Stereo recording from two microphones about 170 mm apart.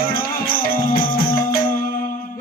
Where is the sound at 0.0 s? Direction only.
60° left (ahead or behind).